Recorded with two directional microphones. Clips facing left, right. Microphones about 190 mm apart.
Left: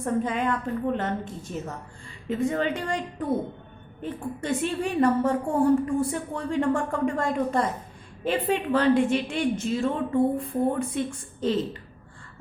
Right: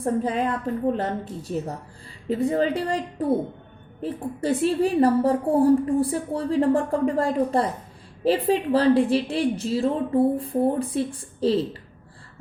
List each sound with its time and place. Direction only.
0.0 s a woman's voice: 35° right (ahead or behind)